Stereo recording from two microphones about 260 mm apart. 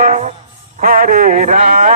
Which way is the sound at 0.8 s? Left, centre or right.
Right.